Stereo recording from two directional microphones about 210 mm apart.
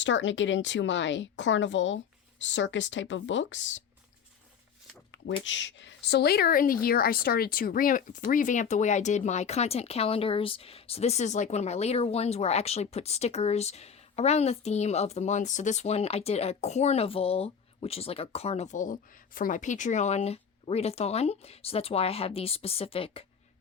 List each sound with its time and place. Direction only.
0.0 s speech: 60° left (ahead or behind)
5.5 s a woman's voice: 60° left (ahead or behind); by 23.2 s 25° left (ahead or behind)